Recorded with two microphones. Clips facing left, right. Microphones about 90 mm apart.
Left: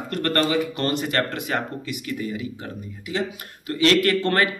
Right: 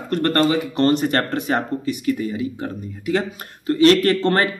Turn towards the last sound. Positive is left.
turn(degrees=-25)  # may be behind; listen again after turning